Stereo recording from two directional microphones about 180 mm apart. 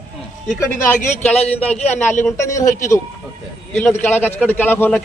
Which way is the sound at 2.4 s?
15° left (ahead or behind).